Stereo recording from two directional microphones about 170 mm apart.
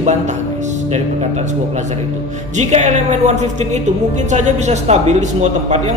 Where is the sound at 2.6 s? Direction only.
45° right (ahead or behind).